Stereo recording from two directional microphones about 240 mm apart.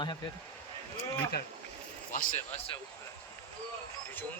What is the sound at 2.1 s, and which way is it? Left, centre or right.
Speech, left.